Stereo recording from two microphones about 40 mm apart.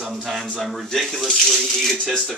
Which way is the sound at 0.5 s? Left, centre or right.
Centre.